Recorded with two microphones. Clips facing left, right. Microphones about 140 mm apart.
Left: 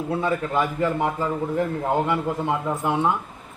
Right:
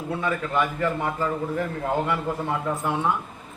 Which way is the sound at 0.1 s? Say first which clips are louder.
Left 2 dB; 25° left (ahead or behind).